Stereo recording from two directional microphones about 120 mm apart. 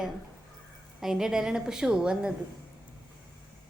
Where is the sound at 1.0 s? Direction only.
5° right (ahead or behind).